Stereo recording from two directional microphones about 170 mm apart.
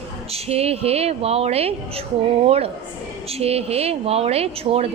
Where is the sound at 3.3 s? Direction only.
35° right (ahead or behind).